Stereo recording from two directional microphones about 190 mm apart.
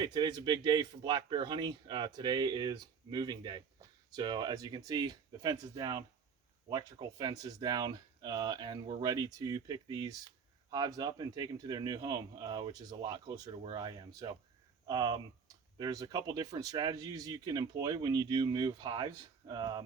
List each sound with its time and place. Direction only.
0.0 s speech: 25° right (ahead or behind)